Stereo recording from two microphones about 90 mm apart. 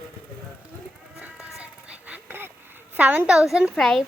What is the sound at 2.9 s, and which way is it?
Speech, 20° right (ahead or behind).